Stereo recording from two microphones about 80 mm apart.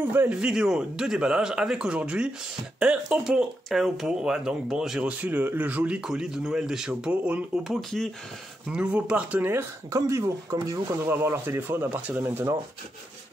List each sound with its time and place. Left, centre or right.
0.0 s speech: right
0.3 s speech: centre
3.6 s speech: centre
5.2 s speech: right
7.6 s speech: centre
8.7 s speech: centre
9.8 s speech: right
11.1 s speech: right